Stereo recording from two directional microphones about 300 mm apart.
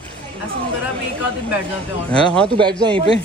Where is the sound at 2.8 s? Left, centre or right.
Centre.